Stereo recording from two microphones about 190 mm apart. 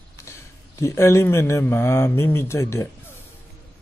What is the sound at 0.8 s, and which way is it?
Speech, 15° left (ahead or behind).